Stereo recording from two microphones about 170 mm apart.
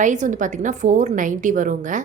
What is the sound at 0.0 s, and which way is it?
Speech, 45° right (ahead or behind).